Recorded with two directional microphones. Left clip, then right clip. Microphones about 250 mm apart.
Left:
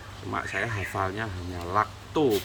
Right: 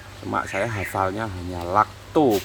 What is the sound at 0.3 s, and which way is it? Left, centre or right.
Speech, right.